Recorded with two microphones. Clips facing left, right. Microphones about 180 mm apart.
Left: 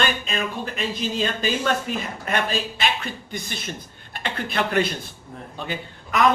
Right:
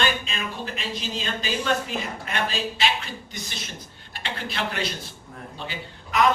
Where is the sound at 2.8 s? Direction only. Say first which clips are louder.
Left 1 dB; 55° left (ahead or behind).